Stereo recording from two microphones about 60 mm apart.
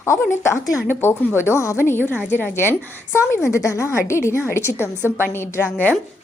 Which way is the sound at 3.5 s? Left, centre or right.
Left.